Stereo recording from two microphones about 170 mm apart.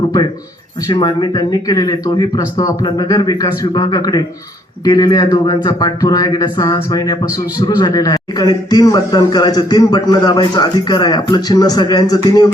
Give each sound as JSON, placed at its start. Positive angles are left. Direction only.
{"t": 0.9, "sound": "a man's voice", "side_deg": 25}